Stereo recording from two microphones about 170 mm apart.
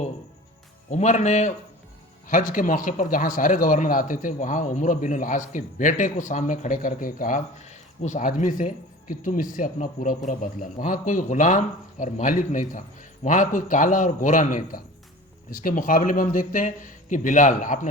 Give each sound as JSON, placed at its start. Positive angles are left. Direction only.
{"t": 0.9, "sound": "a man's voice", "side_deg": 45}